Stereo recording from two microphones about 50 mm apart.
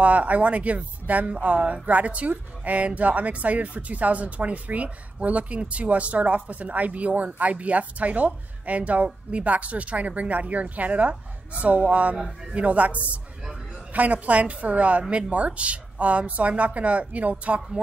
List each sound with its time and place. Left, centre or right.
0.0 s speech: right